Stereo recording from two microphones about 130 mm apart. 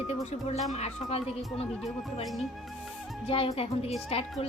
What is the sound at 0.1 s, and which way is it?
Speech, 55° left (ahead or behind).